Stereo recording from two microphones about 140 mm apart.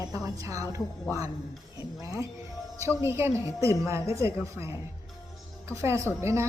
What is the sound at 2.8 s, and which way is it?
A woman's voice, 20° right (ahead or behind).